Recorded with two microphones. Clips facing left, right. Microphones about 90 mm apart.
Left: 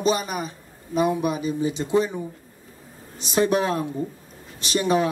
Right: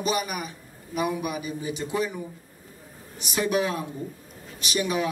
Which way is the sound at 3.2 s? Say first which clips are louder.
Left 4 dB; 30° left (ahead or behind).